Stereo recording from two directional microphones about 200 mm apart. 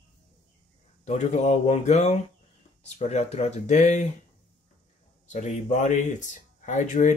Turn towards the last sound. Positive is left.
turn(degrees=40)  # may be behind; listen again after turning